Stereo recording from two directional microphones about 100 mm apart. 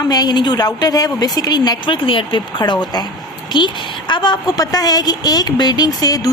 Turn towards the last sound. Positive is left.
turn(degrees=40)  # may be behind; listen again after turning